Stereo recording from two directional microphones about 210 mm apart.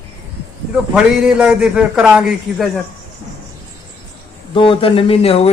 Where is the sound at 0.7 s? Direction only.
5° right (ahead or behind).